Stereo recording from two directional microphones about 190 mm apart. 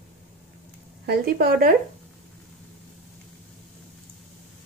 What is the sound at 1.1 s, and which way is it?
Speech, 50° right (ahead or behind).